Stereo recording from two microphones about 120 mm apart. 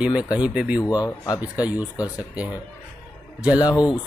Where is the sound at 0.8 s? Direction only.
30° left (ahead or behind).